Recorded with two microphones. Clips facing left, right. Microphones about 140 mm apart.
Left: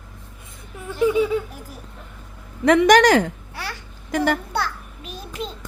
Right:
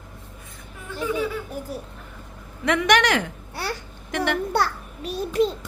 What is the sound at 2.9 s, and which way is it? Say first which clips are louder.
A child's voice: left 6 dB; 40° left (ahead or behind).